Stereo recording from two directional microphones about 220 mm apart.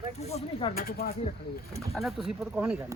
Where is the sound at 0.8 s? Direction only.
40° left (ahead or behind).